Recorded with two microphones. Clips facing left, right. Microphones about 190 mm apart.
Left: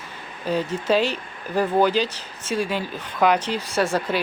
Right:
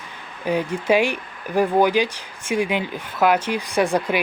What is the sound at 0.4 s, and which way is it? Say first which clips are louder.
Speech: right 2 dB; 10° right (ahead or behind).